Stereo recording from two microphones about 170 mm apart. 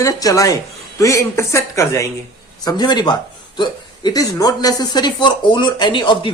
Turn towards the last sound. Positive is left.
turn(degrees=30)  # may be behind; listen again after turning